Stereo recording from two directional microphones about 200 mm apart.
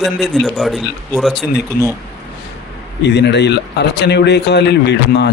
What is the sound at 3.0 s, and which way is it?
Speech, 60° left (ahead or behind).